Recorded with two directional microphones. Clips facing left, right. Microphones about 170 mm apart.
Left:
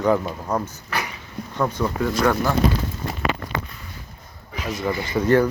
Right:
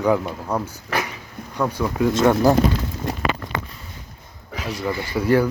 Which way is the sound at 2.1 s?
25° right (ahead or behind).